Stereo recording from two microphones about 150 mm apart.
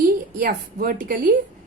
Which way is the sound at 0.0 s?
70° right (ahead or behind).